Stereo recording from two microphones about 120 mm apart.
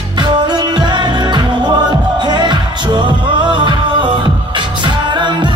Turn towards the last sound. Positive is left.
turn(degrees=-40)  # may be behind; listen again after turning